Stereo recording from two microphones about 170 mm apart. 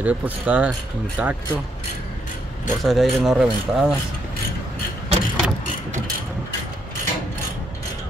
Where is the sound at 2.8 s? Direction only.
Centre (ahead or behind).